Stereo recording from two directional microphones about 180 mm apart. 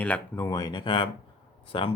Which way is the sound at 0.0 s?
10° left (ahead or behind).